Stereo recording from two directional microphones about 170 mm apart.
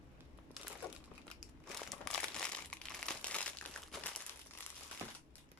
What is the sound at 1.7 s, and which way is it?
Crumpling, 5° left (ahead or behind).